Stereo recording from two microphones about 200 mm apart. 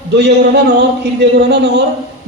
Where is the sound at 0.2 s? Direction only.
55° right (ahead or behind).